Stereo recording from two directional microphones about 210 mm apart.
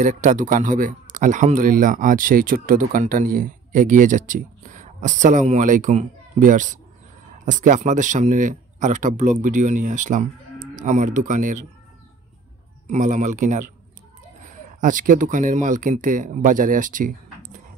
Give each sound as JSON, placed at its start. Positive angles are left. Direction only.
{"t": 0.0, "sound": "speech", "side_deg": -35}
{"t": 12.8, "sound": "speech", "side_deg": -35}